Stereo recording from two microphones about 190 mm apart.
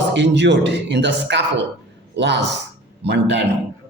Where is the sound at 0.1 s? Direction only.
70° right (ahead or behind).